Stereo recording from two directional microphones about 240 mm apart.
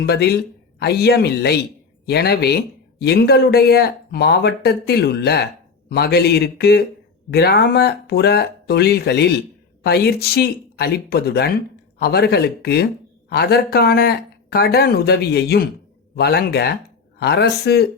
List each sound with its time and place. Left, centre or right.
0.0 s speech: left